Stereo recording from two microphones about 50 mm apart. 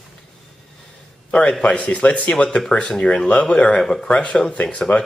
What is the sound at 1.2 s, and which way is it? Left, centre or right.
A man's voice, left.